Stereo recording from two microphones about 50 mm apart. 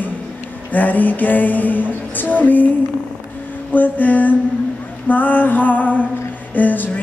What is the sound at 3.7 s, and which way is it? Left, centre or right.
Music, left.